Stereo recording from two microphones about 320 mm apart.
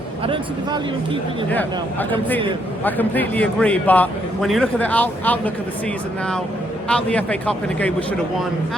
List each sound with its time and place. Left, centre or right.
0.3 s speech: centre
1.5 s a man's voice: centre
6.8 s a man's voice: centre